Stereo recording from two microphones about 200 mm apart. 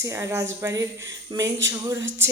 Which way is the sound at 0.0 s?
15° right (ahead or behind).